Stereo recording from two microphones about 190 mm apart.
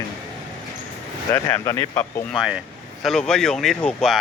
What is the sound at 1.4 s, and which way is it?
Speech, 15° left (ahead or behind).